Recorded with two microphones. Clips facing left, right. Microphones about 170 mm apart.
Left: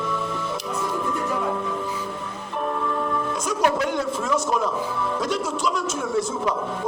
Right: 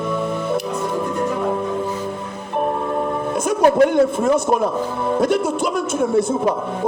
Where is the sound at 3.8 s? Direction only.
55° right (ahead or behind).